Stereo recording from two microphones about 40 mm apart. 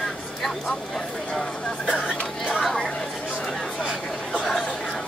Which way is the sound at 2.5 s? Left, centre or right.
Centre.